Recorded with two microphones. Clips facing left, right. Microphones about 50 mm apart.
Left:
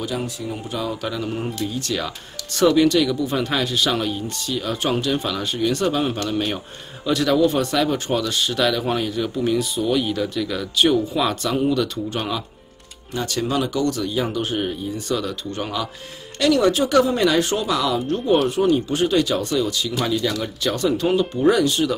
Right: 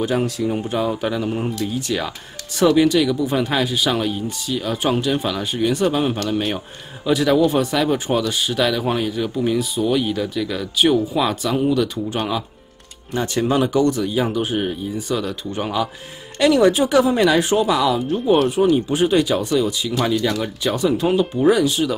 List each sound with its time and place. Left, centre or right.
0.0 s speech: right
1.2 s speech: centre
13.1 s speech: right; by 15.9 s centre
16.3 s speech: right; by 21.9 s centre